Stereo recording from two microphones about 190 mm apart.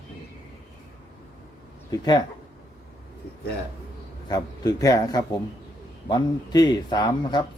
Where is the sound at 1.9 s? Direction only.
20° left (ahead or behind).